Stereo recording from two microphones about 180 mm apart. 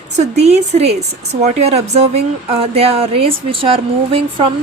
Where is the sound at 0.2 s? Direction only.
35° right (ahead or behind).